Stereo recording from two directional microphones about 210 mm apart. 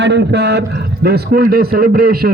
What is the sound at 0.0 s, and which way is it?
A man's voice, 55° right (ahead or behind).